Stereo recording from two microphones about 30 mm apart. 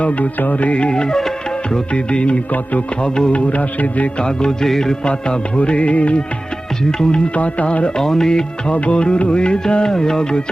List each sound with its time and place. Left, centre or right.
0.0 s music: left
1.9 s music: left
3.3 s music: left
4.2 s music: left
4.6 s music: centre
5.0 s music: left
7.3 s music: left
7.9 s music: centre
8.6 s music: left